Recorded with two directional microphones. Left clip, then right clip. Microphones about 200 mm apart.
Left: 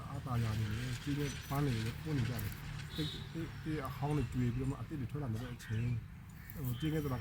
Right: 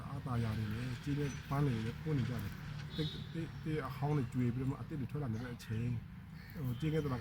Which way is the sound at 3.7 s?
Centre (ahead or behind).